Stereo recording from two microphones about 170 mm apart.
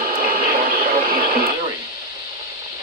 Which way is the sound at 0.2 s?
60° right (ahead or behind).